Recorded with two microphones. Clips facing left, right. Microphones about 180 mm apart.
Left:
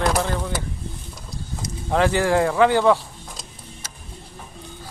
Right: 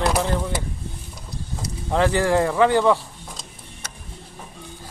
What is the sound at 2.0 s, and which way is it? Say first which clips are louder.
Speech: even; 20° left (ahead or behind).